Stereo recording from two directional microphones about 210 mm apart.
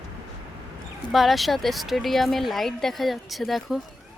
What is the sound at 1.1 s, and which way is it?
Speech, centre (ahead or behind).